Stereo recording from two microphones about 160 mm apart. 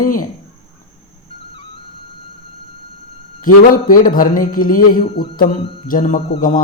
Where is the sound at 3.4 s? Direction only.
60° left (ahead or behind).